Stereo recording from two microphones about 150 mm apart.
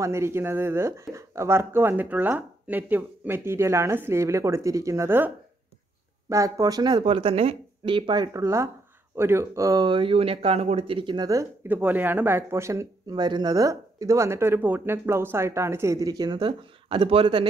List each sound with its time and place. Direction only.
0.0 s speech: 20° right (ahead or behind)
11.6 s speech: 10° right (ahead or behind); by 17.5 s 35° right (ahead or behind)